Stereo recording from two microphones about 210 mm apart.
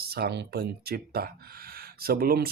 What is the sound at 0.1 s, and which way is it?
Speech, 50° right (ahead or behind).